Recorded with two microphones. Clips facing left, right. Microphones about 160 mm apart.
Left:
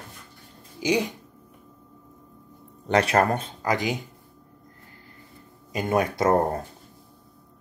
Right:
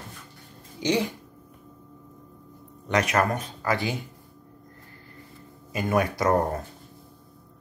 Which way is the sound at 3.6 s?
15° left (ahead or behind).